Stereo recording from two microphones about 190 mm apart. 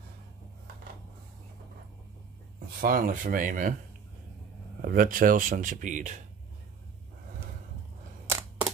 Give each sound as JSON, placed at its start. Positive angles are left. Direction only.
{"t": 2.8, "sound": "speech", "side_deg": -45}
{"t": 4.8, "sound": "speech", "side_deg": -50}
{"t": 8.3, "sound": "a sound", "side_deg": -10}